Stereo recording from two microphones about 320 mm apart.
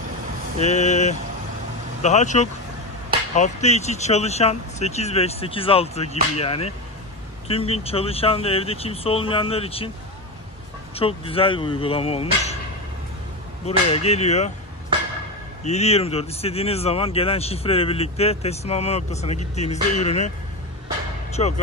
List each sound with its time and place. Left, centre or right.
0.6 s speech: centre
11.0 s speech: centre
13.7 s speech: centre
15.6 s speech: centre
21.4 s speech: centre